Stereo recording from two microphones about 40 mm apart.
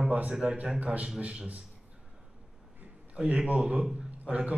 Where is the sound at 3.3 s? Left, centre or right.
Right.